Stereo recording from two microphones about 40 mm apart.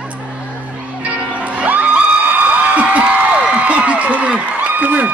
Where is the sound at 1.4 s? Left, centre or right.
Right.